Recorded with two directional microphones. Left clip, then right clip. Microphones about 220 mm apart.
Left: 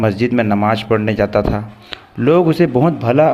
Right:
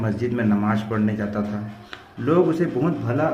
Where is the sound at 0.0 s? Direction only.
40° left (ahead or behind).